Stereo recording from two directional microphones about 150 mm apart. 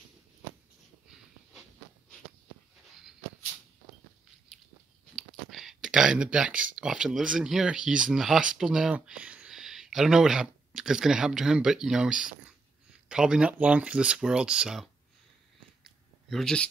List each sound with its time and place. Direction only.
4.5 s biting: 5° left (ahead or behind)
5.1 s speech: centre (ahead or behind)
15.8 s a sound: centre (ahead or behind)